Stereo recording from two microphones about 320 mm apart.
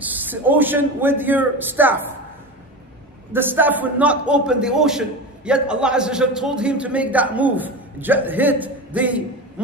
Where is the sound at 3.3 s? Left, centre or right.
Centre.